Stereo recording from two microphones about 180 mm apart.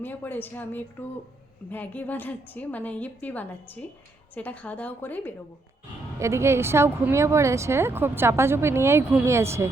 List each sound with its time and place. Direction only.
0.0 s a woman's voice: 10° left (ahead or behind)
6.1 s speech: 15° right (ahead or behind)